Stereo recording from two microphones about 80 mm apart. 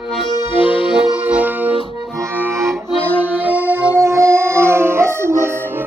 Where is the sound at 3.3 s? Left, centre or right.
Right.